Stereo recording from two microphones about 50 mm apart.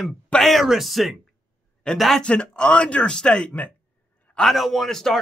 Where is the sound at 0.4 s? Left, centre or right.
Centre.